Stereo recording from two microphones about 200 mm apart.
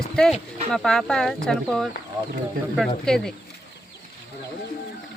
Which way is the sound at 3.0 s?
5° left (ahead or behind).